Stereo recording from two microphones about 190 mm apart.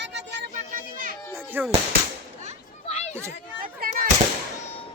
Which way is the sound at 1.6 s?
10° right (ahead or behind).